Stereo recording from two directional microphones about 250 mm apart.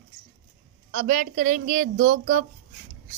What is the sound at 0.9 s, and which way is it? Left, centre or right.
Speech, right.